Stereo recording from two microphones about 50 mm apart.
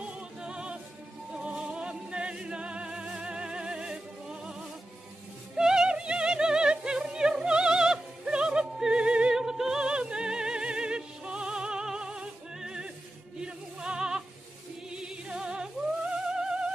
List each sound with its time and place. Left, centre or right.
0.0 s music: centre
5.6 s music: centre
7.0 s opera: centre
9.3 s music: centre